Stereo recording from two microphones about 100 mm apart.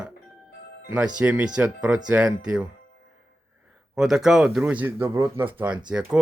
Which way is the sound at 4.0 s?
5° right (ahead or behind).